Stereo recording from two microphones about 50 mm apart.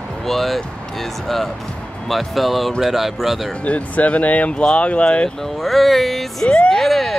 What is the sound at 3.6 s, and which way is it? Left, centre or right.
Speech, left.